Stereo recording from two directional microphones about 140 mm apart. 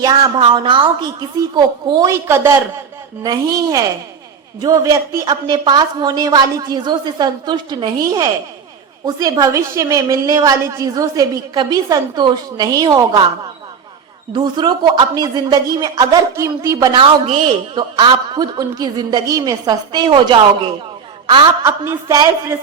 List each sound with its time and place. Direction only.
0.0 s a woman's voice: 30° right (ahead or behind)
14.3 s a woman's voice: 35° right (ahead or behind)
21.6 s a woman's voice: 20° right (ahead or behind)